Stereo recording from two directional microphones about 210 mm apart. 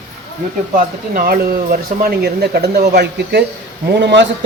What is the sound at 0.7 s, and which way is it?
A man's voice, 40° right (ahead or behind).